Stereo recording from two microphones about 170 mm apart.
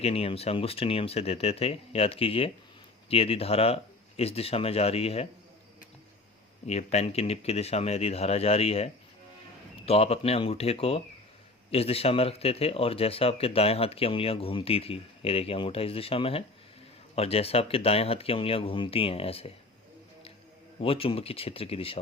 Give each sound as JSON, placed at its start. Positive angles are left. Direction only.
{"t": 0.0, "sound": "speech", "side_deg": 35}
{"t": 6.7, "sound": "speech", "side_deg": 40}
{"t": 20.8, "sound": "speech", "side_deg": 35}